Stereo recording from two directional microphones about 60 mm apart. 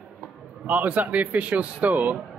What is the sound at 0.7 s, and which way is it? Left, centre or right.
A man's voice, right.